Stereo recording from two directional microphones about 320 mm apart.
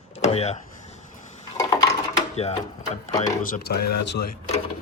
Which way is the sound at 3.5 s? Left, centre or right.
Left.